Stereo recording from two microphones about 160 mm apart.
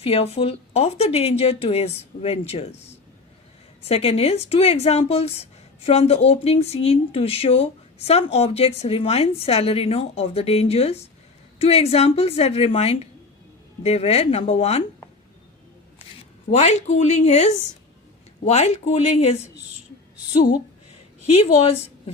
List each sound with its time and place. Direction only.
0.0 s speech: 35° left (ahead or behind)
3.8 s speech: 40° left (ahead or behind)
16.5 s speech: 45° left (ahead or behind)
21.3 s speech: 40° left (ahead or behind)